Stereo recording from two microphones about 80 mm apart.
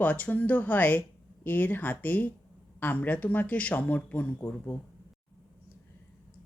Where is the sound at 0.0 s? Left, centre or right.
Centre.